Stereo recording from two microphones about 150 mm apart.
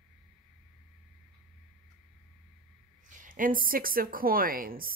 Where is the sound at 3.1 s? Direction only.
60° right (ahead or behind).